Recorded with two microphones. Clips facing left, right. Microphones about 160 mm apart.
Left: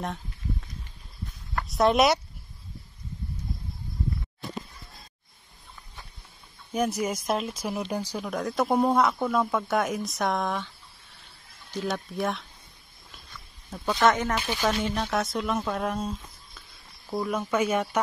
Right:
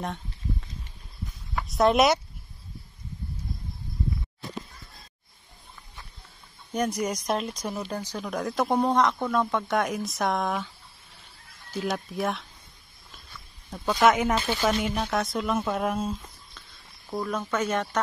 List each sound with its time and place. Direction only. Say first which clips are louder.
0.0 s a sound: even; centre (ahead or behind)
1.5 s speech: right 1 dB; centre (ahead or behind)
6.7 s speech: even; 5° left (ahead or behind)
11.7 s speech: right 1 dB; centre (ahead or behind)
13.7 s speech: right 2 dB; 5° right (ahead or behind)